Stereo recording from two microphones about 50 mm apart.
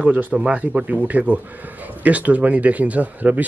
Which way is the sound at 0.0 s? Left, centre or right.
Right.